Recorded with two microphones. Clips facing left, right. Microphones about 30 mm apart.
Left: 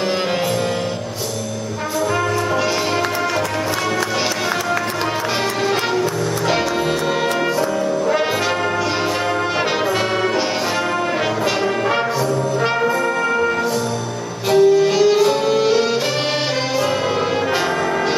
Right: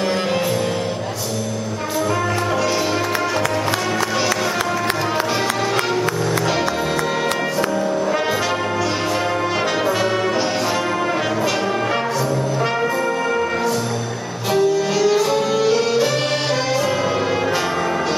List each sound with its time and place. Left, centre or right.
14.5 s music: centre